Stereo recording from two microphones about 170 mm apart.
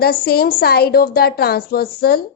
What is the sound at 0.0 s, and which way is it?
A woman's voice, 65° left (ahead or behind).